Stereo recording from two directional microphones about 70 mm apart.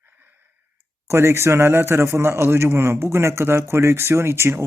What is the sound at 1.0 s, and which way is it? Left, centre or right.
Speech, right.